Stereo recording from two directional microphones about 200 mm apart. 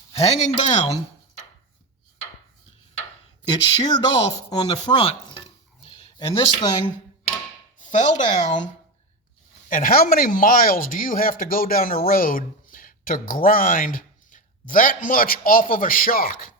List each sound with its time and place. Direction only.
0.2 s speech: 35° left (ahead or behind)
3.5 s speech: 20° left (ahead or behind)
4.4 s stir: 20° left (ahead or behind)
7.8 s speech: 35° left (ahead or behind)